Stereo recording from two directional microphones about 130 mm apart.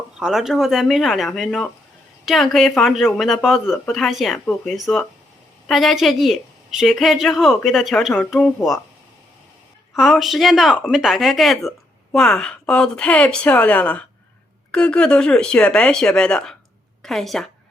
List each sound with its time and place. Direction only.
0.2 s a woman's voice: 5° right (ahead or behind)
10.0 s a woman's voice: centre (ahead or behind)